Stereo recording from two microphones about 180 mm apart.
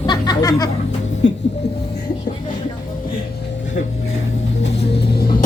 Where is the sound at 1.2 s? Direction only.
80° left.